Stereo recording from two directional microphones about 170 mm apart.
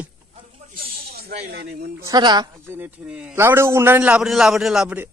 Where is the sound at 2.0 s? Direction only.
25° right (ahead or behind).